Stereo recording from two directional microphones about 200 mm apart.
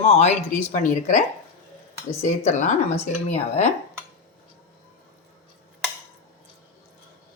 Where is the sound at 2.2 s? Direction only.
35° left (ahead or behind).